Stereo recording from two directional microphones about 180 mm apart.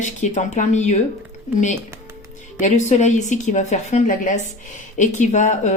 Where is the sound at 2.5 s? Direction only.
45° left (ahead or behind).